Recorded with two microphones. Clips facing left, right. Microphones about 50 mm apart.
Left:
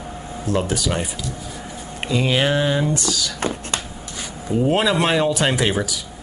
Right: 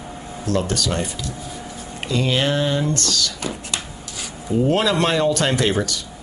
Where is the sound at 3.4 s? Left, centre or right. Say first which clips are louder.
Left 3 dB; left.